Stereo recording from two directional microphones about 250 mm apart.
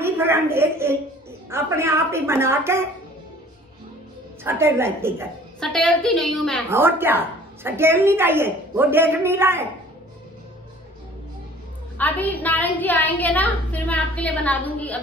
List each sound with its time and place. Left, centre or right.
0.0 s a sound: centre
1.5 s a woman's voice: centre
4.5 s a woman's voice: centre
5.6 s a woman's voice: centre
6.7 s a woman's voice: centre
12.0 s a woman's voice: centre